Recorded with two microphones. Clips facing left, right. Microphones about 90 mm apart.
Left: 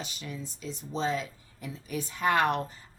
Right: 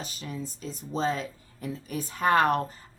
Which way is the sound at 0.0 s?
40° right (ahead or behind).